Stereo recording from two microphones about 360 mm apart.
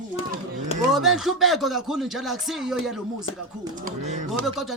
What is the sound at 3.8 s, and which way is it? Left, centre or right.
Speech, centre.